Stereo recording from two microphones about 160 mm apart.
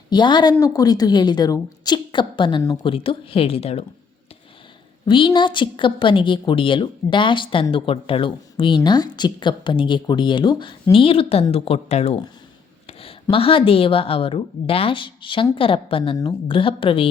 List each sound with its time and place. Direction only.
0.1 s a woman's voice: 30° left (ahead or behind)
5.0 s a woman's voice: 30° left (ahead or behind)
12.9 s a sound: 35° left (ahead or behind)
13.3 s a woman's voice: 35° left (ahead or behind)